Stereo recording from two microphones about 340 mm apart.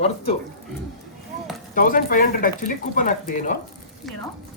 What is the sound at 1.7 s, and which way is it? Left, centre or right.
Speech, left.